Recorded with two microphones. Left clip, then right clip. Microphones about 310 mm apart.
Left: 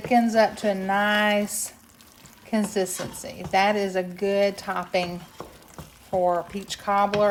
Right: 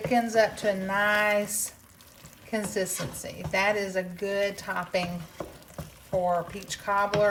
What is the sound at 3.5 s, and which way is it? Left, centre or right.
Speech, left.